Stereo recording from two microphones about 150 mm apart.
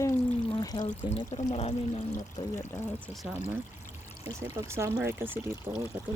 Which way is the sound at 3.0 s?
Centre (ahead or behind).